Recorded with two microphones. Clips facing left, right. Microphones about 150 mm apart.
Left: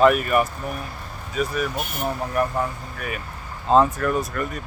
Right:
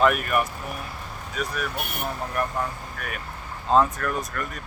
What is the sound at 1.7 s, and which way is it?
Speech, 60° right (ahead or behind).